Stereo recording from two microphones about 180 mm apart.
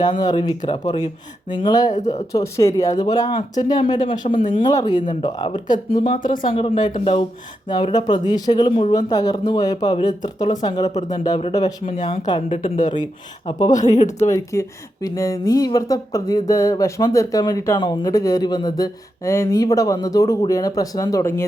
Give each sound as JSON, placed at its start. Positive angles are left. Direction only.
{"t": 0.0, "sound": "speech", "side_deg": 25}
{"t": 1.9, "sound": "speech", "side_deg": 40}
{"t": 2.3, "sound": "speech", "side_deg": 15}
{"t": 6.1, "sound": "speech", "side_deg": 50}
{"t": 6.5, "sound": "speech", "side_deg": 30}
{"t": 10.8, "sound": "speech", "side_deg": 40}
{"t": 12.5, "sound": "speech", "side_deg": 40}
{"t": 13.4, "sound": "speech", "side_deg": 25}
{"t": 14.0, "sound": "speech", "side_deg": 35}
{"t": 14.3, "sound": "speech", "side_deg": 15}